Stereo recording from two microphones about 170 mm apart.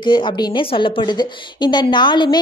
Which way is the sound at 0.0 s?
30° left (ahead or behind).